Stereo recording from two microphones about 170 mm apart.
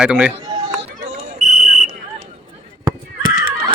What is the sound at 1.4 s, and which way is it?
Whistle, 50° right (ahead or behind).